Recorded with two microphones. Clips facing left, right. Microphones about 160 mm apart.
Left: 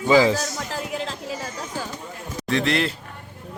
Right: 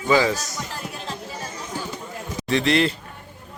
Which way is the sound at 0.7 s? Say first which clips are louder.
Left 6 dB; 90° left.